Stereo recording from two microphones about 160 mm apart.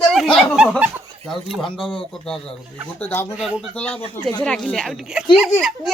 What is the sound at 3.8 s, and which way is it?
Speech, 5° left (ahead or behind).